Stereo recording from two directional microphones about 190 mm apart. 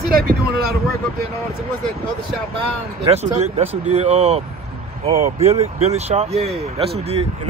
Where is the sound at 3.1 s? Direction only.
35° right (ahead or behind).